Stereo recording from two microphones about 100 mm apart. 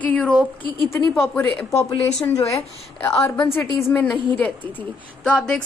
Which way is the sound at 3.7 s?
25° left (ahead or behind).